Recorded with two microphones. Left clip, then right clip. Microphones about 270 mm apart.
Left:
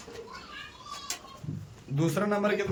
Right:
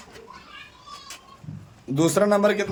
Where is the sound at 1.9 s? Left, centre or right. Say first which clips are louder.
Right 9 dB; right.